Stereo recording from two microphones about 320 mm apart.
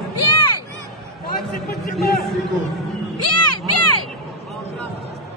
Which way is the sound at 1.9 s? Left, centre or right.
Centre.